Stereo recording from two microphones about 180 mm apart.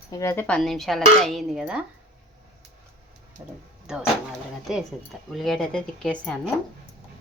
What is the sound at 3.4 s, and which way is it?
Speech, 15° right (ahead or behind).